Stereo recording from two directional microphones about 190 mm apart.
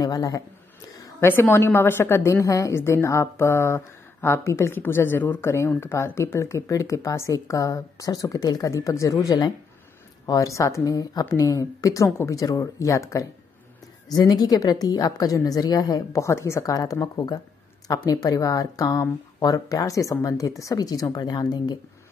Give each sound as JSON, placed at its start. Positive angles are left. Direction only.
{"t": 0.0, "sound": "a woman's voice", "side_deg": 20}